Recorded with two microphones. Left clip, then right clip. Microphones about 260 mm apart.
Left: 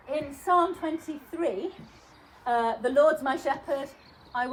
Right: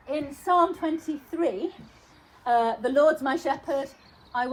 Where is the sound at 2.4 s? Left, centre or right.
Right.